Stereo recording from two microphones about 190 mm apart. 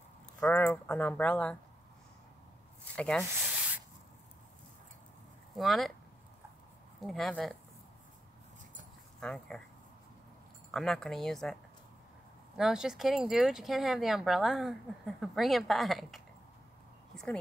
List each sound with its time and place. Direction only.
0.4 s speech: 10° left (ahead or behind)
3.0 s speech: 5° left (ahead or behind)
3.3 s a sound: 5° right (ahead or behind)
5.6 s speech: centre (ahead or behind)
7.0 s speech: centre (ahead or behind)
9.2 s speech: 5° left (ahead or behind)
10.7 s speech: centre (ahead or behind)
12.5 s speech: 5° right (ahead or behind)